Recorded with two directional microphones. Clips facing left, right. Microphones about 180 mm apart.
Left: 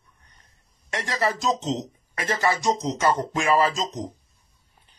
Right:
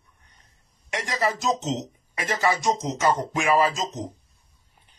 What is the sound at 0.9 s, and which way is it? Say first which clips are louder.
Speech: even; 15° right (ahead or behind).